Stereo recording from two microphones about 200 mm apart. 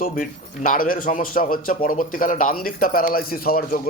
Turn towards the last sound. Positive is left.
turn(degrees=45)  # may be behind; listen again after turning